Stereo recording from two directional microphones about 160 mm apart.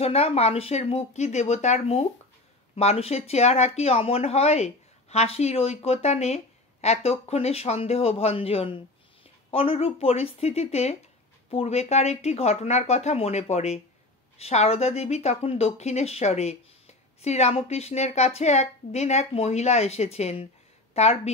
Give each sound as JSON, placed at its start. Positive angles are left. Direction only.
{"t": 0.0, "sound": "speech", "side_deg": 40}